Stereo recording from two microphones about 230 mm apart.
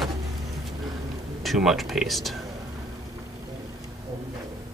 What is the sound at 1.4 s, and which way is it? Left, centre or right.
Speech, centre.